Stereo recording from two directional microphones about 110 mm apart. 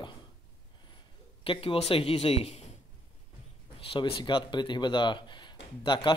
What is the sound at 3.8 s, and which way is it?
Speech, 55° left (ahead or behind).